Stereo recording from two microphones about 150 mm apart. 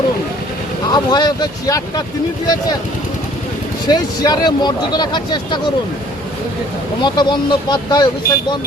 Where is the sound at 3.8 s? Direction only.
25° left (ahead or behind).